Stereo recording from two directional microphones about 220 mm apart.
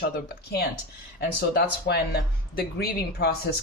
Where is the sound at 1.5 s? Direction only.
45° left (ahead or behind).